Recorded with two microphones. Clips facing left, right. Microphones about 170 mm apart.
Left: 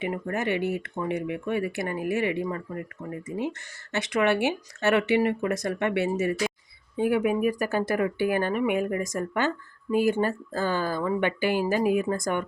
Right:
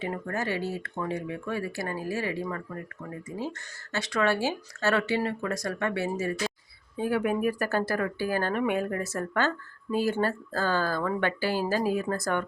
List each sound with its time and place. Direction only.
0.0 s speech: 20° left (ahead or behind)
7.2 s speech: 10° left (ahead or behind)